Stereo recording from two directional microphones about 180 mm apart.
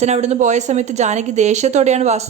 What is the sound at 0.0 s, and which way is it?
A man's voice, 40° right (ahead or behind).